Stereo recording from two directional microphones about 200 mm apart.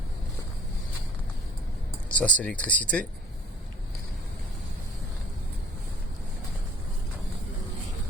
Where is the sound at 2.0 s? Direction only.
5° left (ahead or behind).